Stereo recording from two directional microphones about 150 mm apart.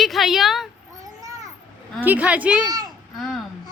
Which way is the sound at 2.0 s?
10° right (ahead or behind).